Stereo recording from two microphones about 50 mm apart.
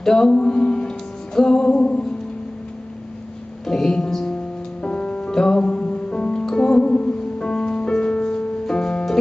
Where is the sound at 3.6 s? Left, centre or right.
Centre.